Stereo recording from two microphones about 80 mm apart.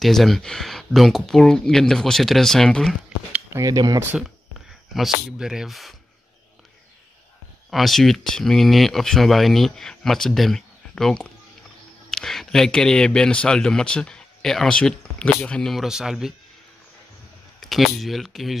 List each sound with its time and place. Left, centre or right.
0.0 s speech: centre
3.5 s speech: right
4.6 s speech: centre
7.7 s speech: centre
15.7 s speech: centre
17.6 s speech: centre